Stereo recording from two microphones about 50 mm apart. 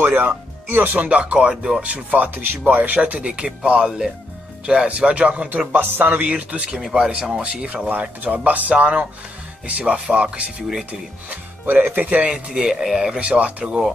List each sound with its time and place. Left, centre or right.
0.0 s speech: right
5.8 s speech: right
6.8 s speech: centre
7.1 s speech: right
11.9 s speech: right
12.3 s speech: centre
13.2 s speech: right